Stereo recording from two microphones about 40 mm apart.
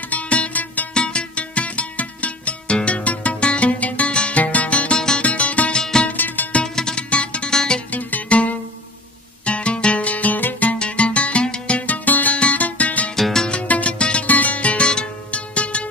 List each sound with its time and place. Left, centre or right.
0.1 s music: left
0.9 s music: left
4.1 s music: left
4.4 s music: left
5.7 s music: centre
6.1 s music: left
6.6 s music: centre
7.1 s music: left
7.9 s music: left
9.4 s music: left
10.8 s music: left
13.1 s music: centre
13.5 s music: left
14.2 s music: left